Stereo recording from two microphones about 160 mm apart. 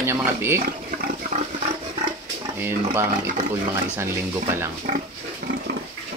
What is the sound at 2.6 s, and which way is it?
Speech, 15° right (ahead or behind).